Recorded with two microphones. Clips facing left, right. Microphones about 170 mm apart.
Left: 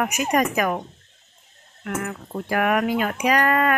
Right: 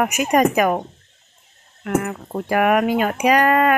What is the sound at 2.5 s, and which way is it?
Speech, 20° right (ahead or behind).